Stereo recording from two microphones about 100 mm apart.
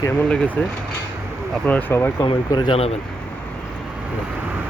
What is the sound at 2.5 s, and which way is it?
Speech, 50° left (ahead or behind).